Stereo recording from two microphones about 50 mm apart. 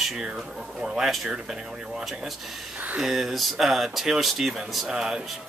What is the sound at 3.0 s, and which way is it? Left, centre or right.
Speech, centre.